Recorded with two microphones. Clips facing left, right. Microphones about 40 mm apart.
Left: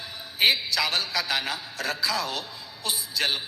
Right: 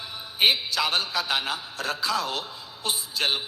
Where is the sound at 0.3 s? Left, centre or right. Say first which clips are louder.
Even; centre.